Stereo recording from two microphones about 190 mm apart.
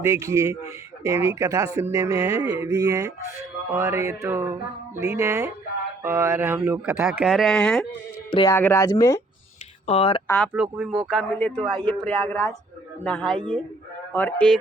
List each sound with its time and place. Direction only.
0.0 s speech: 15° right (ahead or behind); by 7.9 s 5° left (ahead or behind)
8.3 s speech: 25° left (ahead or behind)
8.5 s speech: 10° left (ahead or behind)
9.8 s speech: 30° left (ahead or behind)
10.2 s speech: 10° left (ahead or behind)
10.5 s speech: 5° right (ahead or behind)
11.1 s speech: 10° left (ahead or behind)
11.7 s speech: 25° right (ahead or behind)
12.0 s speech: 10° left (ahead or behind)